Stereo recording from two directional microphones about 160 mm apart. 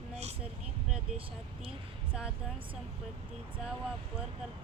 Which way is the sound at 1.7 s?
5° right (ahead or behind).